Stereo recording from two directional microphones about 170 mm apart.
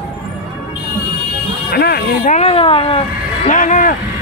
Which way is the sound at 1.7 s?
70° left (ahead or behind).